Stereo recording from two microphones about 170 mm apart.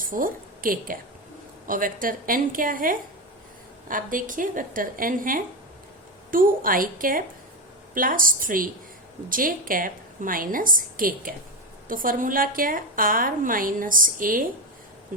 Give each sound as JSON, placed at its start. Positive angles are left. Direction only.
{"t": 0.0, "sound": "a woman's voice", "side_deg": -55}